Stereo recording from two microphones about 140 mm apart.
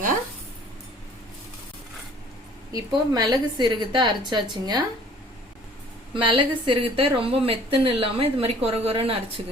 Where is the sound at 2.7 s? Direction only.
30° right (ahead or behind).